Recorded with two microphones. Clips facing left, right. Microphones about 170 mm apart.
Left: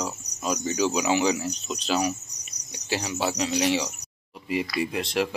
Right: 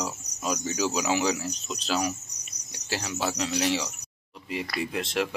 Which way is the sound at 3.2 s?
5° left (ahead or behind).